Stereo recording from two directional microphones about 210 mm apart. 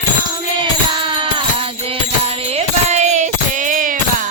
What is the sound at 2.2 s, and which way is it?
Music, 30° right (ahead or behind).